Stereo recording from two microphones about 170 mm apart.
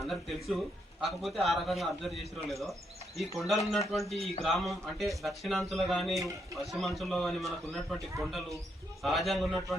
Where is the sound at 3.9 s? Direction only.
Centre (ahead or behind).